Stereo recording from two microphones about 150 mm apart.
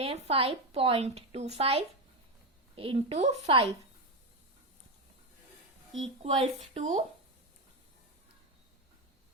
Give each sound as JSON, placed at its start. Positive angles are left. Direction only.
{"t": 0.0, "sound": "a woman's voice", "side_deg": -40}
{"t": 6.2, "sound": "a woman's voice", "side_deg": -50}